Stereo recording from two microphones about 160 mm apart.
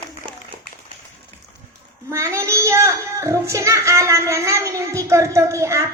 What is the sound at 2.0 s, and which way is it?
A child's voice, 15° right (ahead or behind).